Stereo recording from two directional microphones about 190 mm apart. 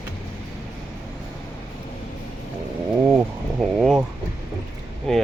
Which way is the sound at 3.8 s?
Centre (ahead or behind).